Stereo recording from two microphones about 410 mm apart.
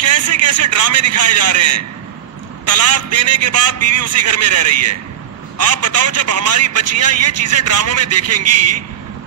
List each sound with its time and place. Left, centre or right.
0.0 s a man's voice: right